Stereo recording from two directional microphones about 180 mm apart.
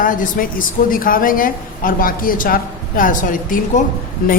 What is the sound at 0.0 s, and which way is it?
A woman's voice, 50° left (ahead or behind).